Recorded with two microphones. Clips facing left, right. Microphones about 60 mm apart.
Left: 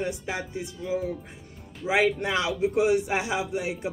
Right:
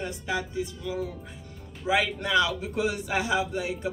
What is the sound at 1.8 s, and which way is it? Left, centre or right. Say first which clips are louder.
Speech: even; centre.